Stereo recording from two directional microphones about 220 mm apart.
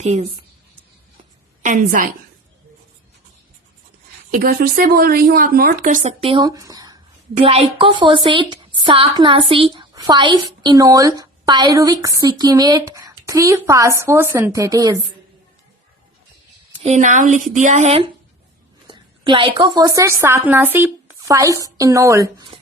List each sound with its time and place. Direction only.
0.0 s a woman's voice: 30° right (ahead or behind)
1.6 s a woman's voice: 35° right (ahead or behind)
4.3 s a woman's voice: 40° right (ahead or behind); by 14.9 s 15° right (ahead or behind)
16.8 s a woman's voice: 30° right (ahead or behind); by 22.5 s 15° right (ahead or behind)